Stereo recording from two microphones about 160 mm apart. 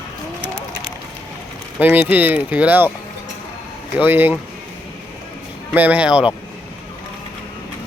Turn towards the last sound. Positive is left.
turn(degrees=-5)  # may be behind; listen again after turning